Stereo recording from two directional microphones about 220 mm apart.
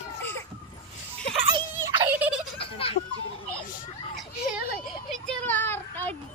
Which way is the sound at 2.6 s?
25° left (ahead or behind).